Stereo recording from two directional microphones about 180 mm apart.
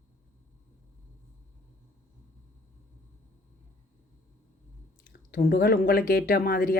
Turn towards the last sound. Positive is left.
turn(degrees=55)  # may be behind; listen again after turning